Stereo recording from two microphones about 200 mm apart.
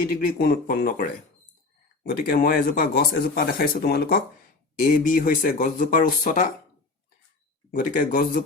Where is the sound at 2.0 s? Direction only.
45° left (ahead or behind).